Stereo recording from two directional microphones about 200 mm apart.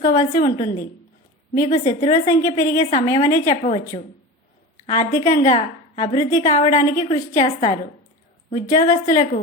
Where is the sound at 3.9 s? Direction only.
30° left (ahead or behind).